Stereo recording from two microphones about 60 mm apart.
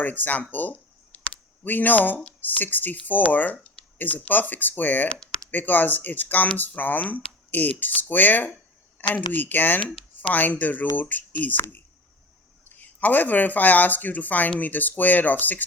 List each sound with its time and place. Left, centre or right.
0.0 s speech: left